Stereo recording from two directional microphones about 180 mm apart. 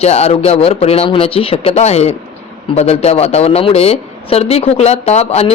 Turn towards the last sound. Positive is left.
turn(degrees=35)  # may be behind; listen again after turning